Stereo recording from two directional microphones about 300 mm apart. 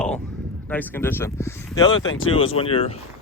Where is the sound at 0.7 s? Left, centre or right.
Centre.